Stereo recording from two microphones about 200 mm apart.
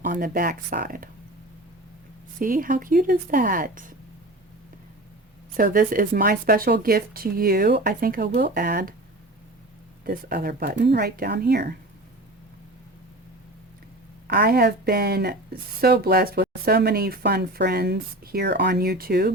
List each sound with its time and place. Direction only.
0.0 s speech: 45° right (ahead or behind)
2.4 s speech: 45° right (ahead or behind)
5.5 s speech: 45° right (ahead or behind)
10.0 s speech: 50° right (ahead or behind)
14.3 s speech: 50° right (ahead or behind)